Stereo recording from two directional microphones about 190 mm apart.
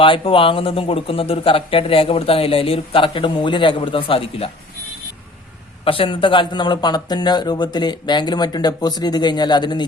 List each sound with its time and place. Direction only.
0.0 s speech: 25° left (ahead or behind)
5.8 s speech: 30° left (ahead or behind)